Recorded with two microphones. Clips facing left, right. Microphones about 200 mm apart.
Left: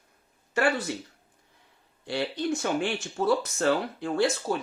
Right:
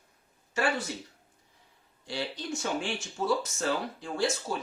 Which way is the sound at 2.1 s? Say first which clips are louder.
Left 6 dB; 60° left (ahead or behind).